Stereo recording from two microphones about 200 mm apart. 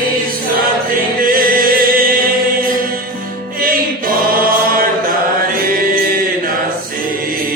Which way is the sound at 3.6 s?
45° right (ahead or behind).